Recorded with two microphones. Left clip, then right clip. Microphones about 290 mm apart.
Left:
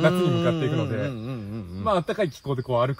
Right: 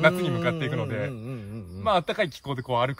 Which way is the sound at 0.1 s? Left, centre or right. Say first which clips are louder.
Left 4 dB; left.